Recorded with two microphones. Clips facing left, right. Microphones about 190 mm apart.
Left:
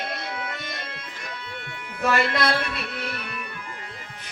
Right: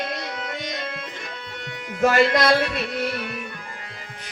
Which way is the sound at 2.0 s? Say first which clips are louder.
Right 5 dB; 45° right (ahead or behind).